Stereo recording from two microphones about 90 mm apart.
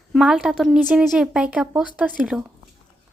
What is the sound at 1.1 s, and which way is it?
Speech, 10° right (ahead or behind).